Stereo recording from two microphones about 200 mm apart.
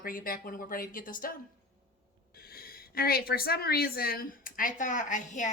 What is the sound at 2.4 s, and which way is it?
A woman's voice, 50° left (ahead or behind).